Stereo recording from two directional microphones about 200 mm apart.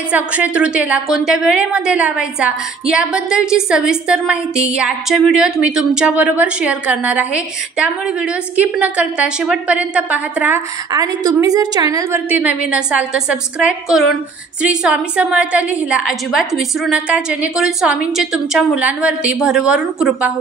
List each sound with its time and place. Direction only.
0.1 s a woman's voice: 5° right (ahead or behind)